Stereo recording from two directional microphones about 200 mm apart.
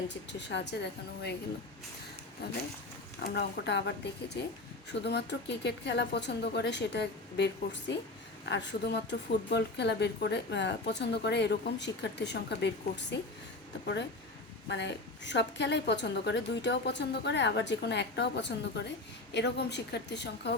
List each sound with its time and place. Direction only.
0.3 s speech: 60° left (ahead or behind)
2.4 s speech: 55° left (ahead or behind)
5.0 s speech: 60° left (ahead or behind)
14.7 s speech: 60° left (ahead or behind)